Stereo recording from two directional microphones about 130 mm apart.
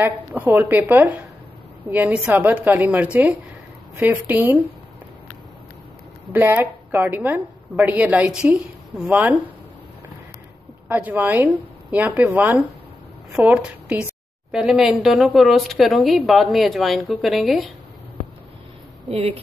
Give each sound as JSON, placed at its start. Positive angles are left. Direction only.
{"t": 0.0, "sound": "a woman's voice", "side_deg": -15}
{"t": 6.3, "sound": "a woman's voice", "side_deg": -15}
{"t": 10.9, "sound": "a woman's voice", "side_deg": -15}
{"t": 19.0, "sound": "speech", "side_deg": -45}